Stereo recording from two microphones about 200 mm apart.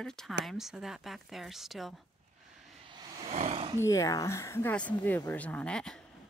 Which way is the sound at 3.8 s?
15° left (ahead or behind).